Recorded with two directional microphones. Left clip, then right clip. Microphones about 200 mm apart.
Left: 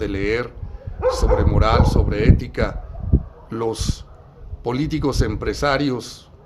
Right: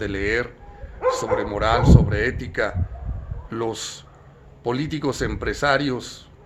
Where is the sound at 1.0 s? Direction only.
25° left (ahead or behind).